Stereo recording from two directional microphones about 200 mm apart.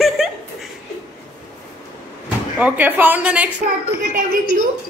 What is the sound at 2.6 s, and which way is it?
Speech, 5° right (ahead or behind).